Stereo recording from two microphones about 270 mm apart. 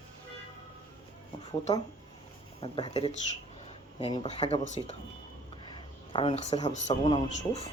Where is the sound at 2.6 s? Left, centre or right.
Centre.